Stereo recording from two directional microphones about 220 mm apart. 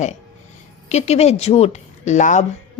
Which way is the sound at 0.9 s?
30° left (ahead or behind).